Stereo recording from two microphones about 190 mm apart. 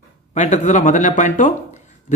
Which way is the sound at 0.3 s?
40° left (ahead or behind).